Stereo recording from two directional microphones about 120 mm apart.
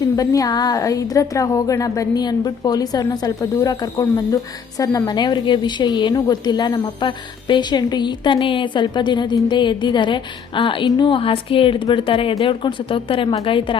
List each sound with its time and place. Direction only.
0.2 s a woman's voice: 30° left (ahead or behind); by 13.7 s 45° left (ahead or behind)